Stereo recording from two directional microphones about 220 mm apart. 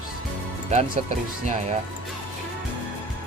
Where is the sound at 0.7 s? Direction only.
30° right (ahead or behind).